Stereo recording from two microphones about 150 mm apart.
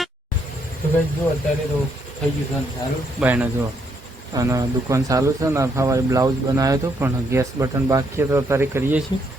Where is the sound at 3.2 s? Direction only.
10° right (ahead or behind).